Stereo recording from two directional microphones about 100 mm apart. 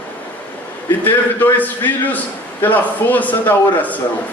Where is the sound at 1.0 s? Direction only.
20° left (ahead or behind).